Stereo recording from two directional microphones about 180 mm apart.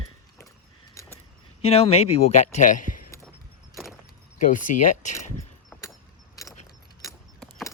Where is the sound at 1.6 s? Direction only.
30° left (ahead or behind).